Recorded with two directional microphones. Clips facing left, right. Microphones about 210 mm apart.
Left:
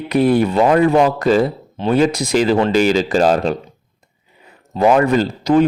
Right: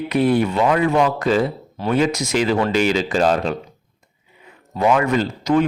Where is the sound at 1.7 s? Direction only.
25° left (ahead or behind).